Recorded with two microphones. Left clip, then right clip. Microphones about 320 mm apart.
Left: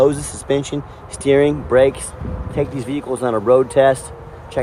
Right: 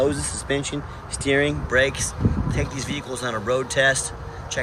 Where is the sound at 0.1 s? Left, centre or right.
Centre.